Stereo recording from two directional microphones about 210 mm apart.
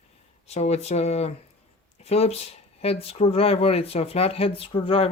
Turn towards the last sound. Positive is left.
turn(degrees=25)  # may be behind; listen again after turning